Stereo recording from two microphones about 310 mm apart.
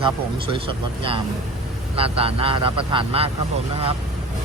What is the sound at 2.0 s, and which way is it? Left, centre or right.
Speech, centre.